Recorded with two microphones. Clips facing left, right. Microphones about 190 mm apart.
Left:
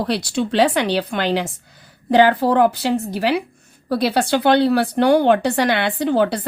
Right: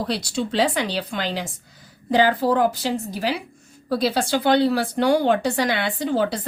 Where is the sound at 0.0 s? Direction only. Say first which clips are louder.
Left 4 dB; 65° left (ahead or behind).